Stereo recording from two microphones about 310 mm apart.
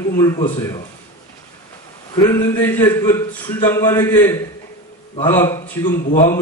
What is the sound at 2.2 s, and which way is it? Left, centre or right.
A man's voice, centre.